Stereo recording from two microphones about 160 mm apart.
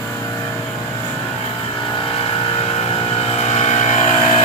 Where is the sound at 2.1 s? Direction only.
35° left (ahead or behind).